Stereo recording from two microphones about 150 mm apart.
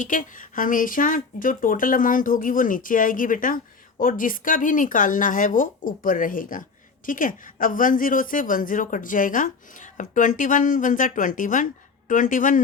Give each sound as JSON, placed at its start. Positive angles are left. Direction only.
{"t": 0.0, "sound": "speech", "side_deg": 60}